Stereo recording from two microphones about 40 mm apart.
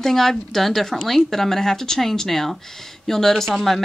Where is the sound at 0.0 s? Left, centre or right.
Centre.